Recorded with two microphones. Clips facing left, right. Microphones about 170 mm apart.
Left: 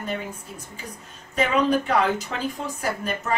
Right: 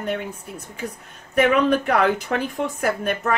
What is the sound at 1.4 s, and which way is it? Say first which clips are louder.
A woman's voice: right 4 dB; 60° right (ahead or behind).